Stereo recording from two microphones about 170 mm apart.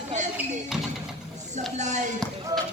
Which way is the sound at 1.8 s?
45° right (ahead or behind).